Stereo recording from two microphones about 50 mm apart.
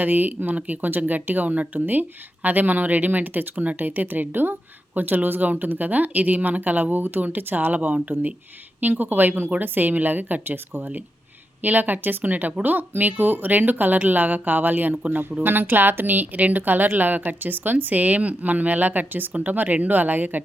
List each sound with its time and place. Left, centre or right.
0.0 s a woman's voice: right